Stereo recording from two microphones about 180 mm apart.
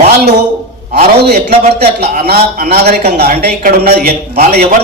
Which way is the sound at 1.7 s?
60° right (ahead or behind).